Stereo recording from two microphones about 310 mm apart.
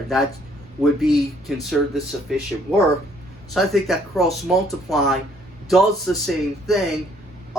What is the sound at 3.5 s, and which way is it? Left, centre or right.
Speech, centre.